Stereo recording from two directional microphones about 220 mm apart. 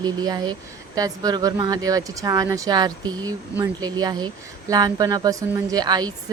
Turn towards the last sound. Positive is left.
turn(degrees=-20)  # may be behind; listen again after turning